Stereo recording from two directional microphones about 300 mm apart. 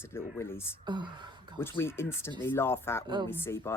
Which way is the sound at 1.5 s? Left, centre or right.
Centre.